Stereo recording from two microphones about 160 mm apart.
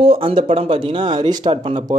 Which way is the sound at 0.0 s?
35° right (ahead or behind).